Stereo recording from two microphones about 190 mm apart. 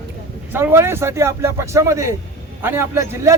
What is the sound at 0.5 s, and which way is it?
A man's voice, 10° right (ahead or behind).